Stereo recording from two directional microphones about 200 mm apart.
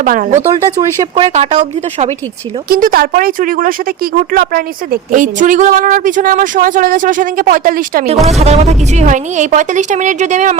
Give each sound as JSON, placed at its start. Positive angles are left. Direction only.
{"t": 0.0, "sound": "a woman's voice", "side_deg": -40}
{"t": 0.8, "sound": "speech", "side_deg": -25}
{"t": 1.3, "sound": "a woman's voice", "side_deg": -35}
{"t": 2.6, "sound": "speech", "side_deg": -45}
{"t": 8.3, "sound": "a woman's voice", "side_deg": -35}